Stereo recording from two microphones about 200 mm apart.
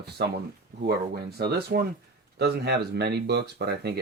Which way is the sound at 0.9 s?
55° right (ahead or behind).